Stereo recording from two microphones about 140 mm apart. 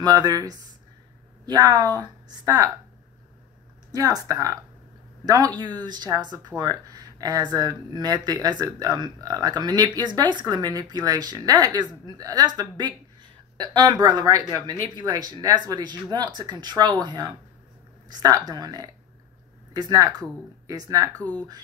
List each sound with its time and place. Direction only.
0.0 s speech: 30° right (ahead or behind)
3.9 s speech: 25° right (ahead or behind)
21.2 s speech: 10° left (ahead or behind)